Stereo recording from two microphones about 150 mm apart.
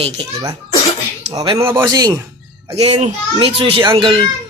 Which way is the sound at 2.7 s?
45° right (ahead or behind).